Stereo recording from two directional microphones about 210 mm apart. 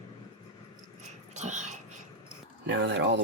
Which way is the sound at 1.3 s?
35° right (ahead or behind).